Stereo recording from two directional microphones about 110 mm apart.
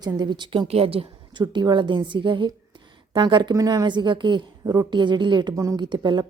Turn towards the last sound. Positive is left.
turn(degrees=-45)  # may be behind; listen again after turning